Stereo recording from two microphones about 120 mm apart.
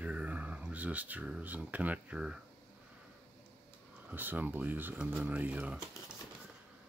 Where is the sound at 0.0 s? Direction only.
10° right (ahead or behind).